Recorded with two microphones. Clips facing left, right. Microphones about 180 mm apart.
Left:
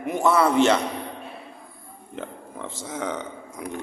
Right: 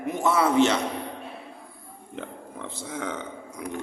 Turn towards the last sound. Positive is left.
turn(degrees=40)  # may be behind; listen again after turning